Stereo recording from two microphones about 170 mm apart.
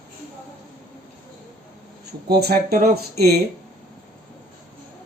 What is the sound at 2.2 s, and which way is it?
Speech, 70° right (ahead or behind).